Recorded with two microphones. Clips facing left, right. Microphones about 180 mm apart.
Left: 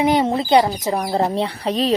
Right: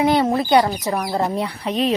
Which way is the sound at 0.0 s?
20° left (ahead or behind).